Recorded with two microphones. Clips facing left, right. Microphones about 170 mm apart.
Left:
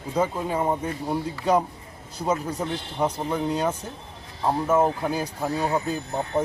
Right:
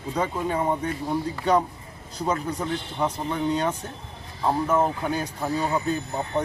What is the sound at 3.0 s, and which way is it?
A man's voice, 10° left (ahead or behind).